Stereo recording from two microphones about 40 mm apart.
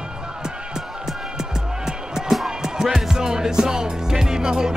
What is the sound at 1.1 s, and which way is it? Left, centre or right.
Music, centre.